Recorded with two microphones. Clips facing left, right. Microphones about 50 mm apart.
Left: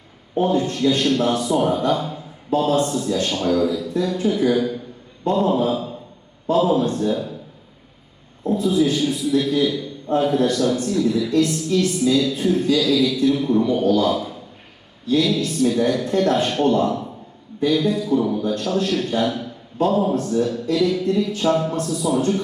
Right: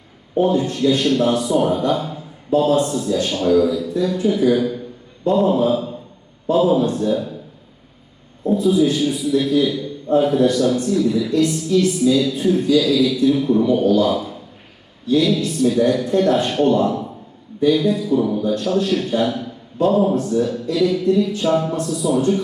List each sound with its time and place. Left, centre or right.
0.4 s a woman's voice: centre
8.6 s a woman's voice: centre
15.4 s a woman's voice: centre